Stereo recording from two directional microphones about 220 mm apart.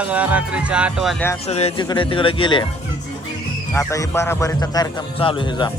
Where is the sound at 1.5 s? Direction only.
30° left (ahead or behind).